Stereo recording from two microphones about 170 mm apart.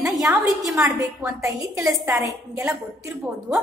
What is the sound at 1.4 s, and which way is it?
A woman's voice, 20° right (ahead or behind).